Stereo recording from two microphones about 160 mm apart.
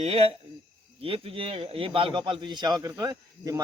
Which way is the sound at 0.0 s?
40° right (ahead or behind).